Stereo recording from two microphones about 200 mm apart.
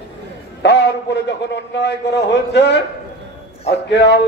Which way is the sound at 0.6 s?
60° left (ahead or behind).